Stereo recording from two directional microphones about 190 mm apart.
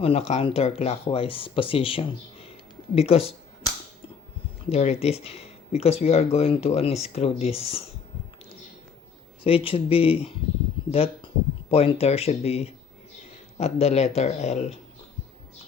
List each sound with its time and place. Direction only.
0.0 s speech: 35° left (ahead or behind)
4.7 s speech: 35° left (ahead or behind)
9.4 s speech: 30° left (ahead or behind)